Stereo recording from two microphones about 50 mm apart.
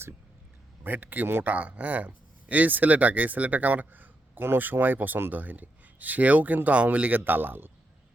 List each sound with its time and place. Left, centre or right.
0.9 s speech: right
1.5 s speech: right
7.3 s speech: right